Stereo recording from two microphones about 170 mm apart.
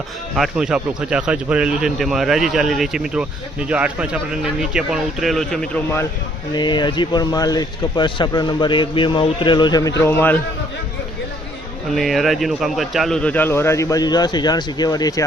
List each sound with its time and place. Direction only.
0.3 s speech: 5° right (ahead or behind)
6.5 s a man's voice: 25° left (ahead or behind)
10.0 s a man's voice: 10° left (ahead or behind)
11.9 s a man's voice: centre (ahead or behind); by 15.2 s 20° left (ahead or behind)